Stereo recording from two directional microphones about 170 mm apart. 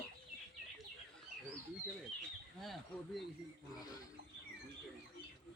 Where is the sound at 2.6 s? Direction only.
Centre (ahead or behind).